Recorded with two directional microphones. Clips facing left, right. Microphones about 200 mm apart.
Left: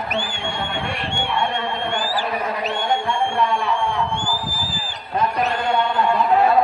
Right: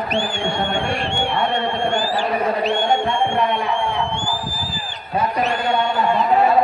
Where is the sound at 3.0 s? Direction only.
25° right (ahead or behind).